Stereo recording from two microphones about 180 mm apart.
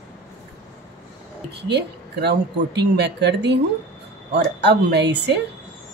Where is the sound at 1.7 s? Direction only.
70° right (ahead or behind).